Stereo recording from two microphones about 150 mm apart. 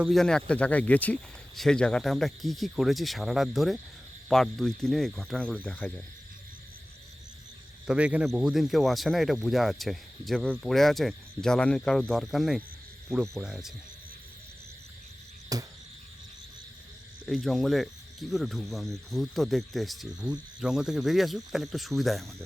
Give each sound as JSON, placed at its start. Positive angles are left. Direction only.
{"t": 0.0, "sound": "speech", "side_deg": 0}
{"t": 7.9, "sound": "speech", "side_deg": -10}
{"t": 15.5, "sound": "cricket", "side_deg": -25}
{"t": 17.2, "sound": "speech", "side_deg": 0}